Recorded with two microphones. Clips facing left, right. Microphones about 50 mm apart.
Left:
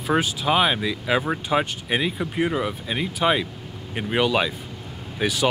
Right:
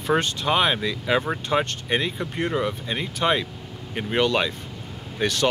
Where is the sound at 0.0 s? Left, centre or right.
Centre.